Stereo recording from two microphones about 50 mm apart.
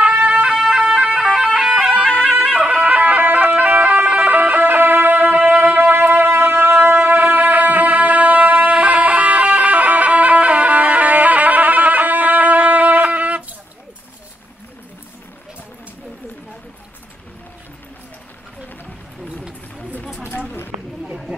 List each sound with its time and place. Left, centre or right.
0.0 s music: right
1.7 s music: right
2.9 s music: right